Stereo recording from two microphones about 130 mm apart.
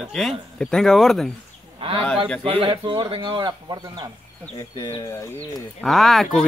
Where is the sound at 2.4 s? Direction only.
40° right (ahead or behind).